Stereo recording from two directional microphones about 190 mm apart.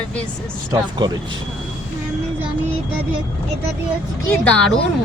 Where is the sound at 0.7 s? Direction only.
20° right (ahead or behind).